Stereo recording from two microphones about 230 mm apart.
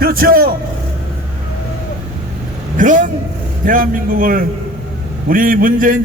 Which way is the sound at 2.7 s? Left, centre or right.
Right.